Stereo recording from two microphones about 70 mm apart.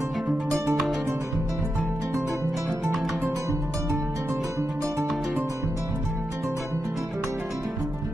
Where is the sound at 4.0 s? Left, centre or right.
Right.